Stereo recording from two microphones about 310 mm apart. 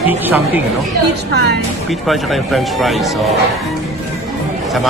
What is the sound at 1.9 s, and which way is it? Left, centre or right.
Speech, centre.